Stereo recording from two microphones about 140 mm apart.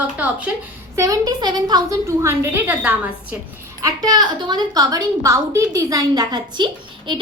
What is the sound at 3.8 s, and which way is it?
A woman's voice, 25° right (ahead or behind).